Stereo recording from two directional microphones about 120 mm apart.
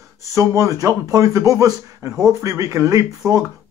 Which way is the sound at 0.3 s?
25° right (ahead or behind).